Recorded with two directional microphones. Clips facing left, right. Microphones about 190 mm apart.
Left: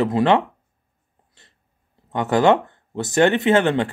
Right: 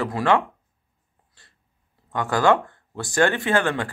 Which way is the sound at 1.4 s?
20° left (ahead or behind).